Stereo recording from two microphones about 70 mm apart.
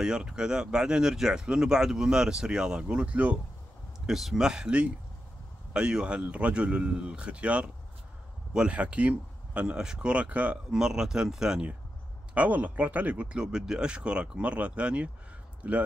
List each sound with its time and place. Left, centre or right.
0.0 s speech: centre
4.0 s speech: centre
12.4 s speech: right